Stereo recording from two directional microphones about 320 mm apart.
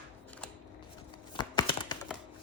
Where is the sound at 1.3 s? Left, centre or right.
Centre.